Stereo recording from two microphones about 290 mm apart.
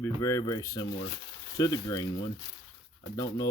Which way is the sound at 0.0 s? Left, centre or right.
Centre.